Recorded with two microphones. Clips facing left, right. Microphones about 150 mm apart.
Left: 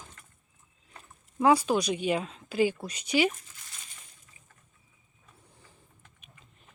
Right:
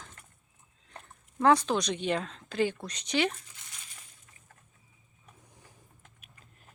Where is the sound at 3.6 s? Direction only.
25° right (ahead or behind).